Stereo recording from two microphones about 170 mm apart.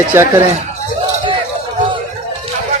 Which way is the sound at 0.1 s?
15° right (ahead or behind).